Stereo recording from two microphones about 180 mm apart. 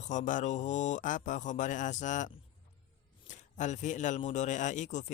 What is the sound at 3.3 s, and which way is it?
A man's voice, 40° left (ahead or behind).